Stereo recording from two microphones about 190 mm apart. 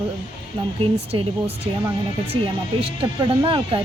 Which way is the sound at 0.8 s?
30° right (ahead or behind).